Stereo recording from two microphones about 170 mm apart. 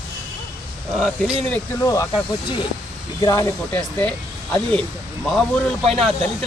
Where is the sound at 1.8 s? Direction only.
20° left (ahead or behind).